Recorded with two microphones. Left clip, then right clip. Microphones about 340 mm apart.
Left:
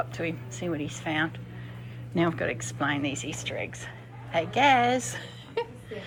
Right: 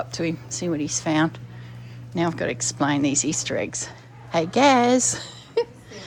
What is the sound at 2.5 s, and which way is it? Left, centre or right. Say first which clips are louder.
A woman's voice: right 6 dB; right.